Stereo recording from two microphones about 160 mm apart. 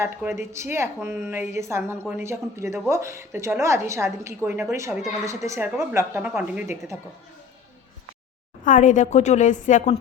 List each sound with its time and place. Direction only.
0.0 s speech: 15° right (ahead or behind)
8.6 s a woman's voice: 55° left (ahead or behind)